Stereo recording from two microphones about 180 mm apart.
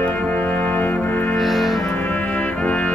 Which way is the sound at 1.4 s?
Centre (ahead or behind).